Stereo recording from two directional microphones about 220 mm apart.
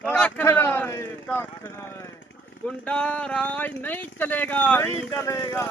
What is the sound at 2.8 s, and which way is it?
Speech, 5° left (ahead or behind).